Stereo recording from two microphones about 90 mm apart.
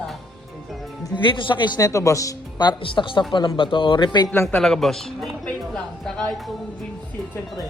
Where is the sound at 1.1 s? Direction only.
65° left (ahead or behind).